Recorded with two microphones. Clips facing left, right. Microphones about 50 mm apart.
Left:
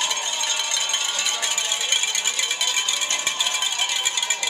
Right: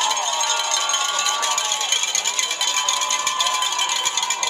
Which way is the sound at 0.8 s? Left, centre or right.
Centre.